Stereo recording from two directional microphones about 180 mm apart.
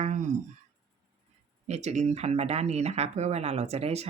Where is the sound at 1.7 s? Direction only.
40° right (ahead or behind).